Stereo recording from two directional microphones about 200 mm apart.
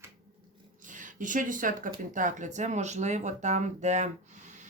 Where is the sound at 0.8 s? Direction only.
40° right (ahead or behind).